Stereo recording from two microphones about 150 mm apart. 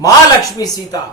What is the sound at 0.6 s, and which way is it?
Speech, 25° left (ahead or behind).